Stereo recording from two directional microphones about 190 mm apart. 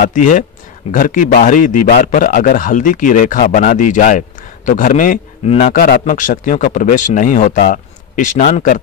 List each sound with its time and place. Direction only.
0.0 s speech: 45° left (ahead or behind)